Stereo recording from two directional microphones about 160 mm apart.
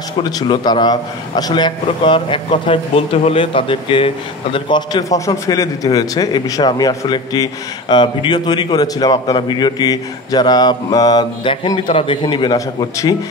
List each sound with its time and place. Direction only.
0.2 s a man's voice: 25° left (ahead or behind)